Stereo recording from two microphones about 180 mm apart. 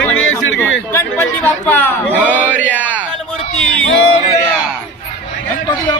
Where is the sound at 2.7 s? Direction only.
10° right (ahead or behind).